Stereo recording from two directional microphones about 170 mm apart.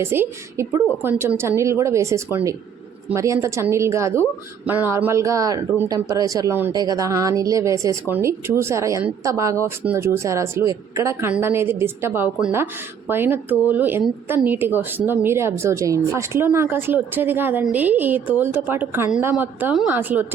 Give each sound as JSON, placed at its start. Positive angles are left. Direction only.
{"t": 0.0, "sound": "a woman's voice", "side_deg": -15}